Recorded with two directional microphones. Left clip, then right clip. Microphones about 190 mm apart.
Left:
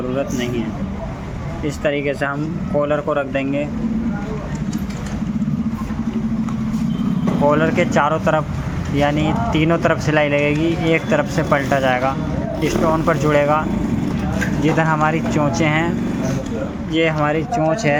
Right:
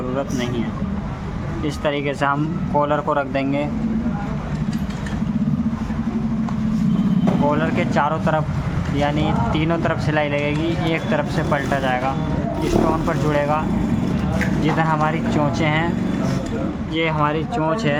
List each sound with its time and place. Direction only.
1.6 s speech: centre (ahead or behind)
7.4 s speech: 20° left (ahead or behind)
16.9 s speech: 15° left (ahead or behind)